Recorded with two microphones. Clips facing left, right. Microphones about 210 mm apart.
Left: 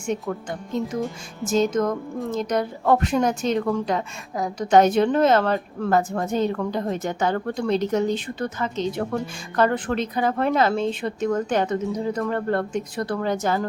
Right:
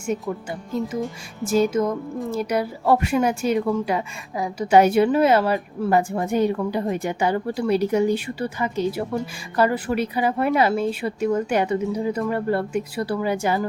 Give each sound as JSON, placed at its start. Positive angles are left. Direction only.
{"t": 0.0, "sound": "speech", "side_deg": -5}